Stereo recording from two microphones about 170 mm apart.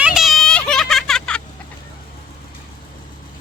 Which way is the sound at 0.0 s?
Centre (ahead or behind).